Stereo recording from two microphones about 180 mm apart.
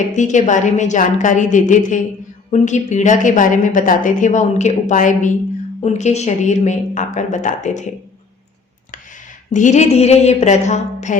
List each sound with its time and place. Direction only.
0.0 s a woman's voice: 40° left (ahead or behind)
9.5 s speech: 45° left (ahead or behind)